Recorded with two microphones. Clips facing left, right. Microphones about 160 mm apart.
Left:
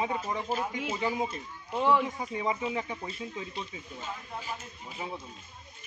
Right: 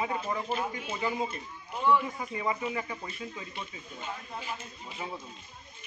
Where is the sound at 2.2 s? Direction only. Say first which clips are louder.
Left 1 dB; 20° left (ahead or behind).